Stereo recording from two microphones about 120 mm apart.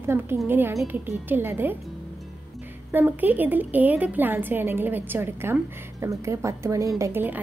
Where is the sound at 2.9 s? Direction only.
15° right (ahead or behind).